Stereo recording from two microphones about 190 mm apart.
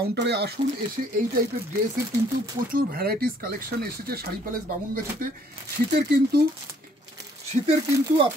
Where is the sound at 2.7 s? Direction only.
50° right (ahead or behind).